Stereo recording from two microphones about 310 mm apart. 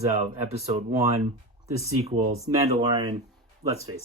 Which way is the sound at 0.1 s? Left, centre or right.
Right.